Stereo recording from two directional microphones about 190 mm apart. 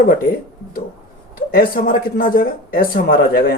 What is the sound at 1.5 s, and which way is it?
Speech, 50° left (ahead or behind).